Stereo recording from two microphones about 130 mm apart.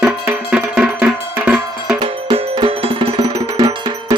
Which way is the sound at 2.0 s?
45° right (ahead or behind).